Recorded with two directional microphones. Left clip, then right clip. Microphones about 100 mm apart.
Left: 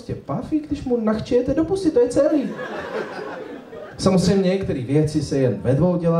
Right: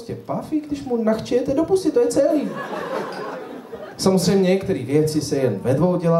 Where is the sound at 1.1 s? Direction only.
50° right (ahead or behind).